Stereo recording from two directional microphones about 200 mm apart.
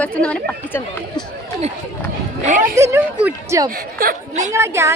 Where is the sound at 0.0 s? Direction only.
5° left (ahead or behind).